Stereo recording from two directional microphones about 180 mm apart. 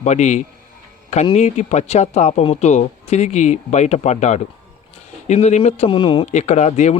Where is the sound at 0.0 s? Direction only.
40° left (ahead or behind).